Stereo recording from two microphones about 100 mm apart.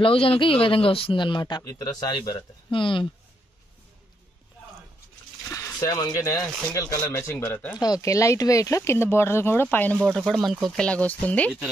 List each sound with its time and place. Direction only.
0.0 s speech: 70° left (ahead or behind); by 1.6 s 50° left (ahead or behind)
1.6 s speech: 35° left (ahead or behind); by 3.1 s 55° left (ahead or behind)
5.9 s speech: 40° left (ahead or behind)
7.4 s speech: 15° left (ahead or behind)
7.7 s speech: 40° left (ahead or behind); by 9.9 s 20° left (ahead or behind)
10.0 s speech: 5° left (ahead or behind)
10.9 s speech: 15° left (ahead or behind)